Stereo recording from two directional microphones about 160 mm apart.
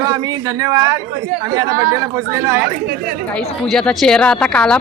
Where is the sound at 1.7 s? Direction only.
70° right (ahead or behind).